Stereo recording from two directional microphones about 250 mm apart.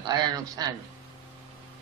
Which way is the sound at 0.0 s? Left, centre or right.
Centre.